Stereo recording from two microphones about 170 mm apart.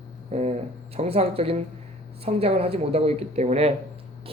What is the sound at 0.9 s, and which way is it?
Speech, 35° right (ahead or behind).